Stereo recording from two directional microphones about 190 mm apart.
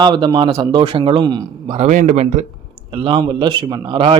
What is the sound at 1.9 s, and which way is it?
Speech, 40° right (ahead or behind).